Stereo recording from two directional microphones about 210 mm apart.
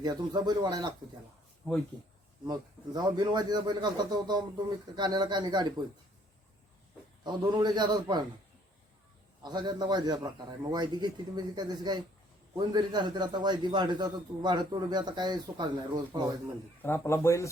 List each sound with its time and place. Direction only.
0.0 s a man's voice: 20° right (ahead or behind)
1.6 s speech: 5° left (ahead or behind)
2.5 s a man's voice: 20° right (ahead or behind)
7.3 s a man's voice: 20° right (ahead or behind)
9.4 s a man's voice: 20° right (ahead or behind)
16.8 s speech: 10° left (ahead or behind)